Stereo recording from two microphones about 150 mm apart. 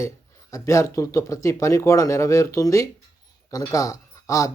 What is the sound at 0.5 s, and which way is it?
Speech, 20° left (ahead or behind).